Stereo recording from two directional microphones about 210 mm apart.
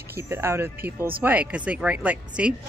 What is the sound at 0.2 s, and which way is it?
Speech, 10° right (ahead or behind).